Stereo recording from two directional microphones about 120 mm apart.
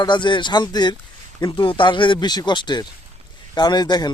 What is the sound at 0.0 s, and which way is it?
A man's voice, 40° left (ahead or behind).